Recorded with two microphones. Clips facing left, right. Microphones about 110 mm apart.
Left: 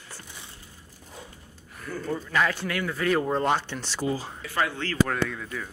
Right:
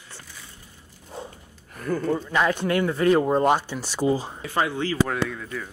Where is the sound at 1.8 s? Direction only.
50° right (ahead or behind).